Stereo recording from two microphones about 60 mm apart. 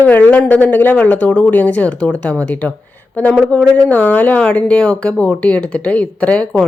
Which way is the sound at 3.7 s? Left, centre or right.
Left.